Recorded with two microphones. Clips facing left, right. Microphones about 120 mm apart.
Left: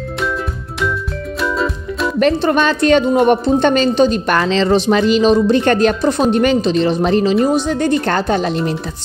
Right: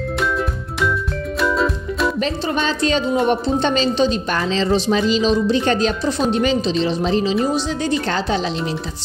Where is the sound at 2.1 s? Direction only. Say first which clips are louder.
Left 7 dB; 60° left (ahead or behind).